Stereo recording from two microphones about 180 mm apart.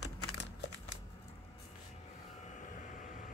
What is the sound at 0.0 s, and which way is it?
Crumpling, 75° left (ahead or behind).